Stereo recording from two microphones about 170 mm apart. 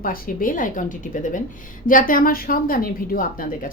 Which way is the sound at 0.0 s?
55° left (ahead or behind).